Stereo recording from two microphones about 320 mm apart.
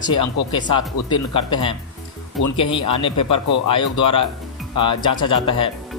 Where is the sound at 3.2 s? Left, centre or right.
Left.